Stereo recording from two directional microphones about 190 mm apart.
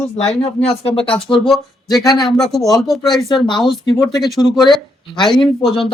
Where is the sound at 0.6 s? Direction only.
30° left (ahead or behind).